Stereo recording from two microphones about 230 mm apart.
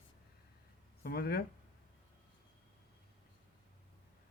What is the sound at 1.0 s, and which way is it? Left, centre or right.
Speech, left.